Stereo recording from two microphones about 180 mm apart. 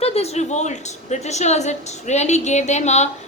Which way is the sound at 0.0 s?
35° left (ahead or behind).